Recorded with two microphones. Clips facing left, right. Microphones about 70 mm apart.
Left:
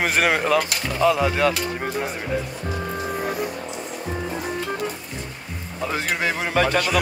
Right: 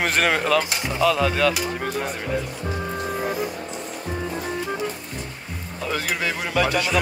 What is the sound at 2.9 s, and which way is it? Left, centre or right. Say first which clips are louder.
Music: even; centre.